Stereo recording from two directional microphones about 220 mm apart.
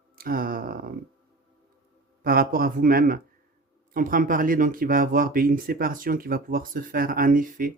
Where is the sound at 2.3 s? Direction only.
40° right (ahead or behind).